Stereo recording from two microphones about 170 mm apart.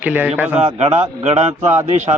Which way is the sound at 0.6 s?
40° right (ahead or behind).